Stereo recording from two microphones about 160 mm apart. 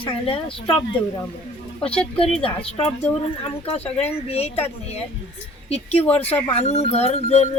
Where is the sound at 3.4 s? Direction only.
35° left (ahead or behind).